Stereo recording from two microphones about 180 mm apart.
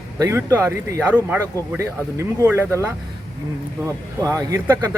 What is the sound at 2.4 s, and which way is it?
Speech, 15° right (ahead or behind).